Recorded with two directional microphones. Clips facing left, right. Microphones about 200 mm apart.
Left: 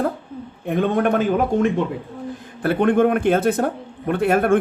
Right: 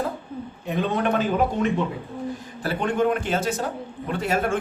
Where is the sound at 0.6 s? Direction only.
55° left (ahead or behind).